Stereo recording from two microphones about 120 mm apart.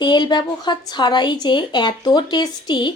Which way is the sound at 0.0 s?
40° left (ahead or behind).